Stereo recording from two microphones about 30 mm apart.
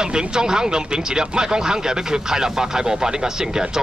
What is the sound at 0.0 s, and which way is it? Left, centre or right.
Speech, right.